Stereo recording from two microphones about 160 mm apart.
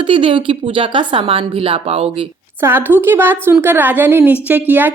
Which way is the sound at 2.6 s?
15° right (ahead or behind).